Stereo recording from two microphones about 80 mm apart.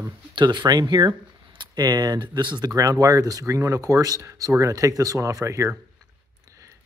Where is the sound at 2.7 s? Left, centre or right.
Right.